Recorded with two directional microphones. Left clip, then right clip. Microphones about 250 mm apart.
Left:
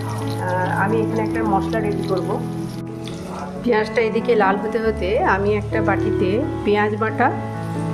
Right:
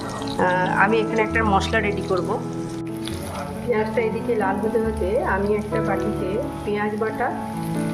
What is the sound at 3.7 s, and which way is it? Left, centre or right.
Speech, left.